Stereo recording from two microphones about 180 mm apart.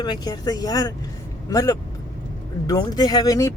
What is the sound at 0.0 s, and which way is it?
Speech, 20° left (ahead or behind).